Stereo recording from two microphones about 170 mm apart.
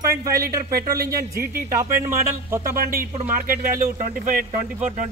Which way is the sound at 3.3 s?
55° right (ahead or behind).